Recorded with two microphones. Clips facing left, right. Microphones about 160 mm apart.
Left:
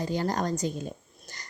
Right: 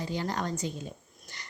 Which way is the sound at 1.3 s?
45° left (ahead or behind).